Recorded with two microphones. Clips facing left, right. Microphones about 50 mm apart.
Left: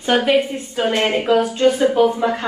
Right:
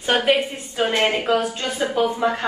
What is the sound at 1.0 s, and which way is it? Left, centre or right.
A woman's voice, left.